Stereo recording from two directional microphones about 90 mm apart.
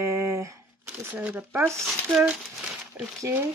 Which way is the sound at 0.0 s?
25° right (ahead or behind).